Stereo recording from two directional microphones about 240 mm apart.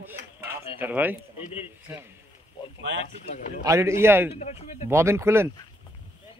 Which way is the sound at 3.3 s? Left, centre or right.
Left.